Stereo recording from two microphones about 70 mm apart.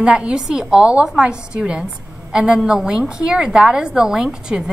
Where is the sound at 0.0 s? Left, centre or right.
Centre.